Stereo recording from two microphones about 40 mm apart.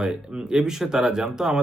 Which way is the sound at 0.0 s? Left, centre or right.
Centre.